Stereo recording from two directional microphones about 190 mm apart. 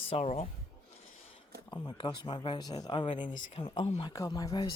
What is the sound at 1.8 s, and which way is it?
Speech, 25° left (ahead or behind).